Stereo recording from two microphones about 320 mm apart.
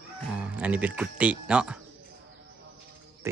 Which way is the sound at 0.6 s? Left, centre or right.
Centre.